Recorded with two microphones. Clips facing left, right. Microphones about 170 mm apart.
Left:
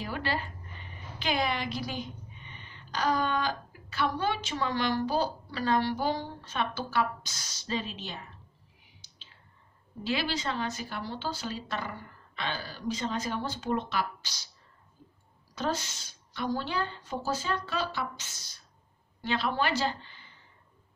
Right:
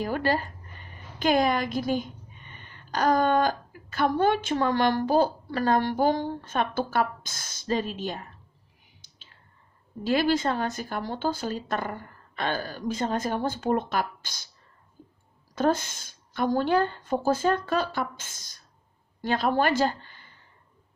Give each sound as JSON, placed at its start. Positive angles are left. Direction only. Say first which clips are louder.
{"t": 0.0, "sound": "a woman's voice", "louder": "right 7 dB", "side_deg": -45}
{"t": 9.0, "sound": "whispering", "louder": "right 1 dB", "side_deg": -50}
{"t": 10.0, "sound": "speech", "louder": "right 8 dB", "side_deg": -45}
{"t": 15.0, "sound": "a sound", "louder": "right 5 dB", "side_deg": -50}
{"t": 15.5, "sound": "speech", "louder": "right 8 dB", "side_deg": -50}